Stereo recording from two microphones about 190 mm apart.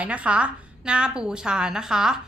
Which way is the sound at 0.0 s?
5° right (ahead or behind).